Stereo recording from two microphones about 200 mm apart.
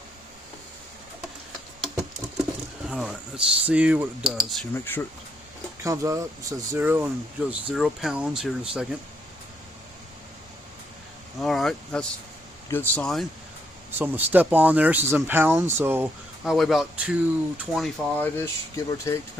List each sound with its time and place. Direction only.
2.0 s speech: 5° right (ahead or behind)
4.7 s speech: 10° left (ahead or behind)
5.8 s speech: 15° right (ahead or behind)
11.3 s speech: centre (ahead or behind)
14.0 s speech: 10° right (ahead or behind)
18.3 s speech: 15° left (ahead or behind)